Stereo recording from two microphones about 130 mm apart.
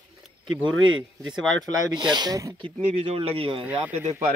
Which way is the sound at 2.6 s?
50° right (ahead or behind).